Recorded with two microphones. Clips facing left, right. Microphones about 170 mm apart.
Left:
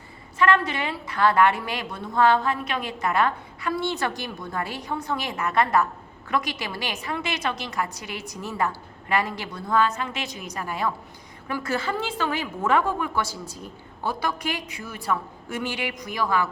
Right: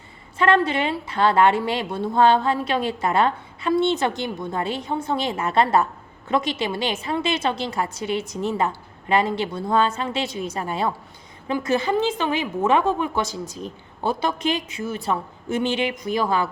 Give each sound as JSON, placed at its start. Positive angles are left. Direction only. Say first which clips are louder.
{"t": 0.3, "sound": "a woman's voice", "louder": "right 3 dB", "side_deg": -30}